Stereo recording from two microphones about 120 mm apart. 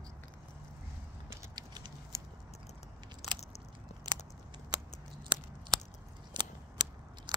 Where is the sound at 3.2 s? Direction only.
65° left (ahead or behind).